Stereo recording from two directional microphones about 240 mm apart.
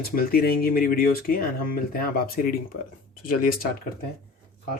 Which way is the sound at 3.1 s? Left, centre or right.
Left.